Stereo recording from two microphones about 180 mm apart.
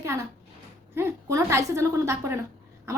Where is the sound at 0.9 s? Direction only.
15° right (ahead or behind).